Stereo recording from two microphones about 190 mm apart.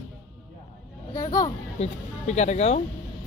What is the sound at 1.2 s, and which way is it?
Speech, 20° left (ahead or behind).